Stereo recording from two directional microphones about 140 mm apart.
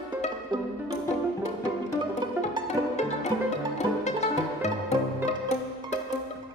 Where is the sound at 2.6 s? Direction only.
55° left (ahead or behind).